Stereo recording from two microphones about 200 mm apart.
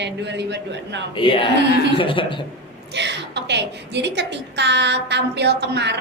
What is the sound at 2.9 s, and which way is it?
A woman's voice, 60° right (ahead or behind).